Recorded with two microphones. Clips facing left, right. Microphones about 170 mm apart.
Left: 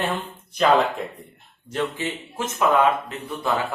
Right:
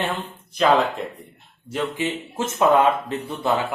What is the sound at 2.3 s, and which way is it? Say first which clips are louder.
Speech: right 2 dB; 25° right (ahead or behind).